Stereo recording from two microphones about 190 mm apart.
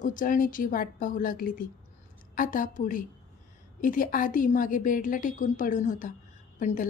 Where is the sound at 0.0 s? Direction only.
45° left (ahead or behind).